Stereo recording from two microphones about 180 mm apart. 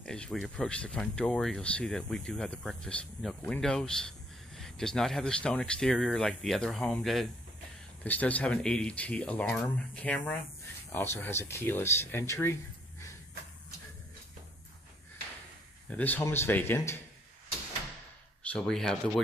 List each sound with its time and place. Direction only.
0.0 s speech: 5° left (ahead or behind)
15.9 s speech: 10° left (ahead or behind)
18.5 s speech: 5° left (ahead or behind)